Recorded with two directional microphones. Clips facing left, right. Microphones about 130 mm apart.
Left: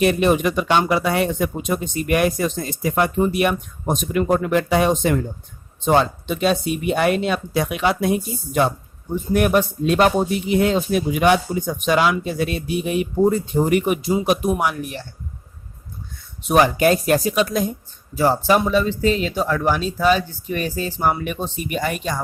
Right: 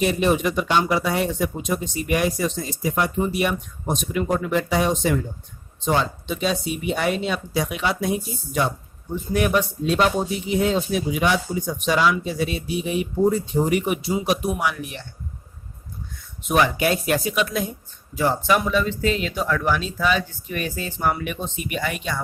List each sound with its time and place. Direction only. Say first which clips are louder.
0.0 s speech: left 3 dB; 60° left (ahead or behind); by 15.0 s 45° left (ahead or behind)
16.4 s speech: left 4 dB; 35° left (ahead or behind)